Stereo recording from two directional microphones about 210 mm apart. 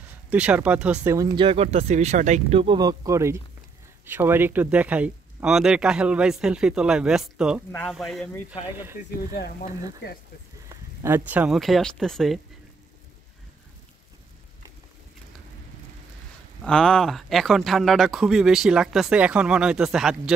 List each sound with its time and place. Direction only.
0.3 s speech: 5° right (ahead or behind)
9.3 s speech: 45° left (ahead or behind)
10.7 s speech: 10° right (ahead or behind)
16.6 s speech: 5° left (ahead or behind)